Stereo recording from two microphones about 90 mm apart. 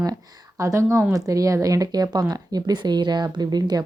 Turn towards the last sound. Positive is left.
turn(degrees=-50)  # may be behind; listen again after turning